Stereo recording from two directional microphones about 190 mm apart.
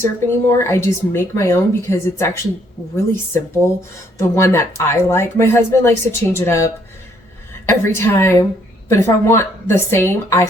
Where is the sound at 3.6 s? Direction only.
15° left (ahead or behind).